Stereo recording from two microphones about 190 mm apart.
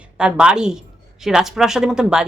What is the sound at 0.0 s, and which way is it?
A woman's voice, 5° right (ahead or behind).